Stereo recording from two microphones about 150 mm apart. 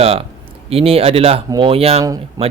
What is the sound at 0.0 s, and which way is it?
A man's voice, 40° right (ahead or behind).